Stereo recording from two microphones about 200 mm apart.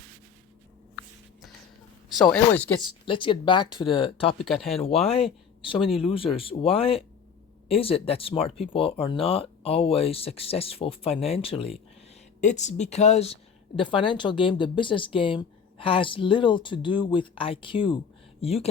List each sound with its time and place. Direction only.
2.1 s speech: centre (ahead or behind)
3.1 s speech: 25° left (ahead or behind)
4.4 s speech: centre (ahead or behind)
5.0 s speech: 30° left (ahead or behind)